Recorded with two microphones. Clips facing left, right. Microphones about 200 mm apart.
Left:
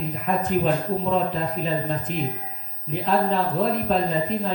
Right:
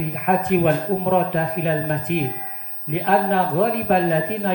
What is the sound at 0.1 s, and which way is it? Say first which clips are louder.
A man's voice: right 4 dB; 65° right (ahead or behind).